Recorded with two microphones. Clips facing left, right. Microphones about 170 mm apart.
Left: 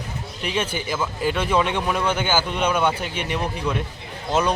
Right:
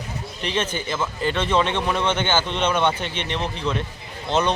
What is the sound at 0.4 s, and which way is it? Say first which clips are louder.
A man's voice: even; 10° left (ahead or behind).